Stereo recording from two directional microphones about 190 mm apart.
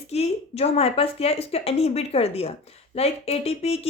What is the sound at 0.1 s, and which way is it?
Speech, 35° left (ahead or behind).